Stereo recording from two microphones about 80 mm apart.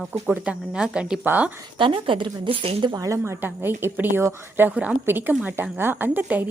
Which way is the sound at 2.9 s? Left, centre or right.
Right.